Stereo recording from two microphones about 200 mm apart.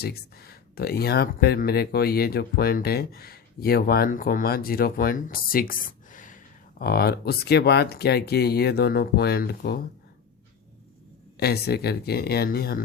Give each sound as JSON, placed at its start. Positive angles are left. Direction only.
{"t": 0.0, "sound": "speech", "side_deg": 50}
{"t": 11.3, "sound": "speech", "side_deg": 55}